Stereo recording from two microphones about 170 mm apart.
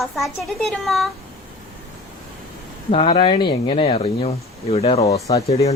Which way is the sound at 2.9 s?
35° left (ahead or behind).